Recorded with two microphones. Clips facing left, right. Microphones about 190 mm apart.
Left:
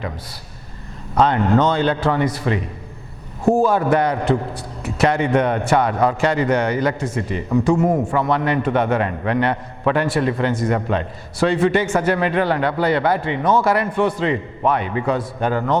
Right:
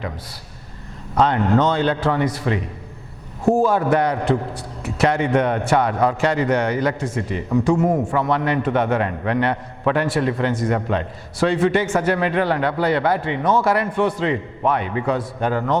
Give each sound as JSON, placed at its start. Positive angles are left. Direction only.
{"t": 1.2, "sound": "a man's voice", "side_deg": 15}
{"t": 3.7, "sound": "a man's voice", "side_deg": 15}